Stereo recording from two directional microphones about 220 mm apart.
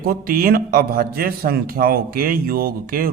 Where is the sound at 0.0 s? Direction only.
40° right (ahead or behind).